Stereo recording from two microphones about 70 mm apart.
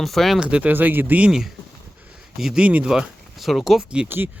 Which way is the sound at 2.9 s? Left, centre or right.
Centre.